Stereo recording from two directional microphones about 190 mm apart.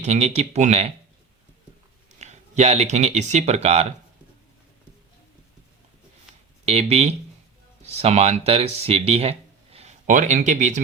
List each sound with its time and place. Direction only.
0.0 s speech: 35° right (ahead or behind)
2.0 s speech: 35° right (ahead or behind)
6.7 s speech: 35° right (ahead or behind)